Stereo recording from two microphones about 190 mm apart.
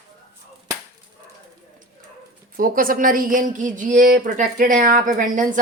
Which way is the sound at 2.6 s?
50° right (ahead or behind).